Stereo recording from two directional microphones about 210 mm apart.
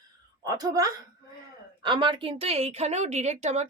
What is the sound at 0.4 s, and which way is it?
A woman's voice, 20° right (ahead or behind).